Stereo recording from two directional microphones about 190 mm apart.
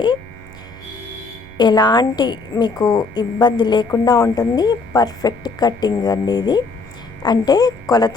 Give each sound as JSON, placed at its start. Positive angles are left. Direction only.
{"t": 1.5, "sound": "a woman's voice", "side_deg": 20}